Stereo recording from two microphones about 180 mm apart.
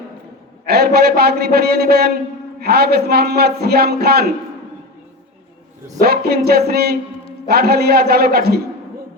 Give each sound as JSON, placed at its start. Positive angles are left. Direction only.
{"t": 0.7, "sound": "a man's voice", "side_deg": -60}
{"t": 6.0, "sound": "a man's voice", "side_deg": -60}